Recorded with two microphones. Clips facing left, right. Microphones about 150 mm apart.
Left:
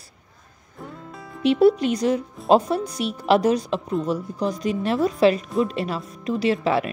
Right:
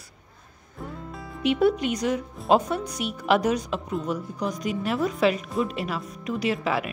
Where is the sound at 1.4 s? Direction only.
30° left (ahead or behind).